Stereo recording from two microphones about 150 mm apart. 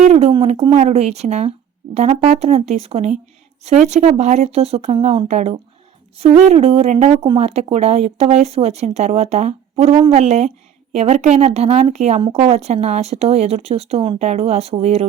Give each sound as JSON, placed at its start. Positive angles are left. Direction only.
{"t": 0.0, "sound": "speech", "side_deg": -45}